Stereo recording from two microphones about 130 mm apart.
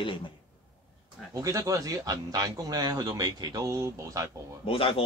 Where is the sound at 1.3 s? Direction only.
25° right (ahead or behind).